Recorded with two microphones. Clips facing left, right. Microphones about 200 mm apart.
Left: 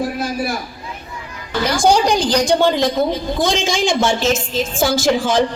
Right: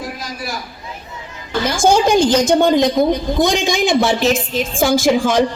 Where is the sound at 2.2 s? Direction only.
20° right (ahead or behind).